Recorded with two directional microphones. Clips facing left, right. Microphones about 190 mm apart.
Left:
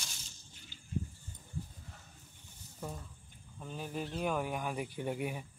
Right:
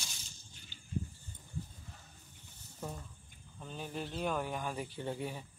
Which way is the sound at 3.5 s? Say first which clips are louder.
Left 1 dB; 5° left (ahead or behind).